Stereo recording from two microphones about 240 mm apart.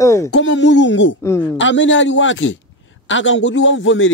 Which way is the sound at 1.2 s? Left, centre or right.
Centre.